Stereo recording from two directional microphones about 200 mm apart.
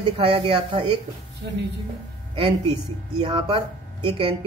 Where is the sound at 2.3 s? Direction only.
25° right (ahead or behind).